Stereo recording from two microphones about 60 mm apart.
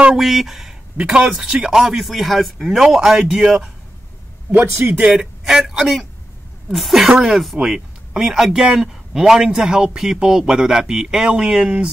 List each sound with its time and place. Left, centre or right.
0.1 s speech: centre
4.5 s speech: right
4.9 s speech: centre
5.2 s speech: centre
7.5 s speech: centre
8.7 s speech: centre